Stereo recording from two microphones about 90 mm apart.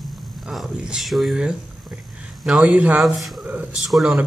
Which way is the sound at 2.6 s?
20° right (ahead or behind).